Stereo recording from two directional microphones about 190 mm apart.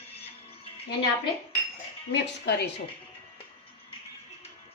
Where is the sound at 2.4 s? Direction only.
60° left (ahead or behind).